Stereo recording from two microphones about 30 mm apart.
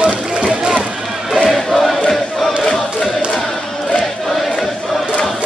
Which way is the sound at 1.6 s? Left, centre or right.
Centre.